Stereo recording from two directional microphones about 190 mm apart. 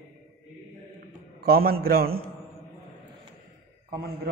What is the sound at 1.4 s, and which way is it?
Speech, 55° right (ahead or behind).